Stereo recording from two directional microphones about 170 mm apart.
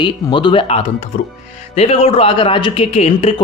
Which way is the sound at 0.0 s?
25° left (ahead or behind).